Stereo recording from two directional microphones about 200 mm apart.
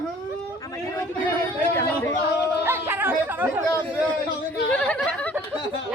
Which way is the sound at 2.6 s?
10° right (ahead or behind).